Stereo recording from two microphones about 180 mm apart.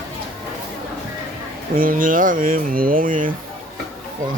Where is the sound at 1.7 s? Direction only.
50° right (ahead or behind).